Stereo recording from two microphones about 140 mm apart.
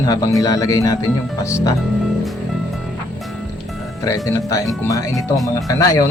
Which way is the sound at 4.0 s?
25° left (ahead or behind).